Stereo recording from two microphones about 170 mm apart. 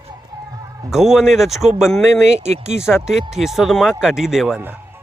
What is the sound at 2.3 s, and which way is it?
Speech, 40° right (ahead or behind).